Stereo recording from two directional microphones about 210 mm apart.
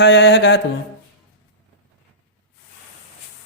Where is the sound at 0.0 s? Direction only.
55° left (ahead or behind).